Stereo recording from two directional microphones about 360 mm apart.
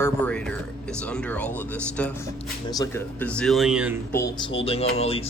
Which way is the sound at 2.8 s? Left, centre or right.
Centre.